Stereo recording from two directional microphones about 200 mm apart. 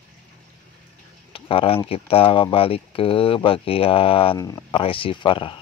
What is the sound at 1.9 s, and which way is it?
Speech, 30° left (ahead or behind).